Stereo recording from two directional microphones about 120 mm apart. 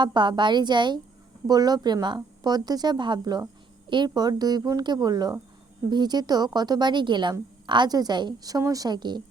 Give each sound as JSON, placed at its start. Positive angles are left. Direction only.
{"t": 0.0, "sound": "a woman's voice", "side_deg": -40}